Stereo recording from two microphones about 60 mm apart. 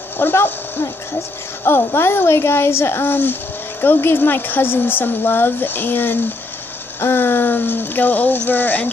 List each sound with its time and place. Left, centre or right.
0.2 s speech: left
7.0 s a sound: left
8.5 s speech: left